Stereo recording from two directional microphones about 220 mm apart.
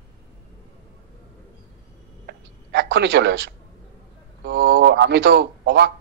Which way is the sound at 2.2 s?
55° right (ahead or behind).